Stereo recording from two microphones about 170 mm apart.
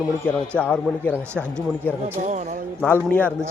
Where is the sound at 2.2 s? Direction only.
45° right (ahead or behind).